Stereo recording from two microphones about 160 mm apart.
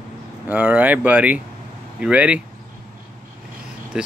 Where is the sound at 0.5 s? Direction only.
10° right (ahead or behind).